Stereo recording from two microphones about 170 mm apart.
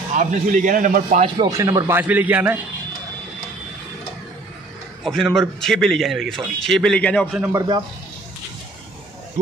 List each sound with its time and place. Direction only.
0.1 s a man's voice: 50° right (ahead or behind)
1.4 s a man's voice: 20° right (ahead or behind)
5.0 s a man's voice: centre (ahead or behind)
7.3 s a man's voice: 15° right (ahead or behind)